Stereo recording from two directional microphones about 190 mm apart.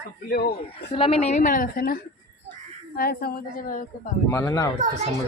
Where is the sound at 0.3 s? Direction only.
60° left (ahead or behind).